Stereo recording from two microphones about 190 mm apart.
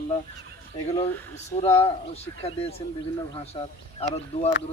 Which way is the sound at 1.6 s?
30° left (ahead or behind).